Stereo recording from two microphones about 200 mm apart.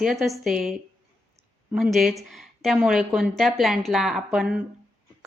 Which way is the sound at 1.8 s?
Centre (ahead or behind).